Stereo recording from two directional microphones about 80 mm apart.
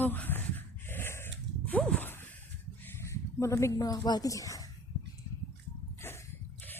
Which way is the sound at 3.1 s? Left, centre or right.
Left.